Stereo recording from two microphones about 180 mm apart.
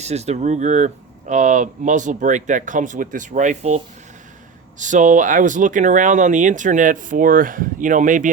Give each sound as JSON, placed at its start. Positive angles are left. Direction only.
{"t": 0.0, "sound": "speech", "side_deg": -35}
{"t": 4.8, "sound": "speech", "side_deg": -45}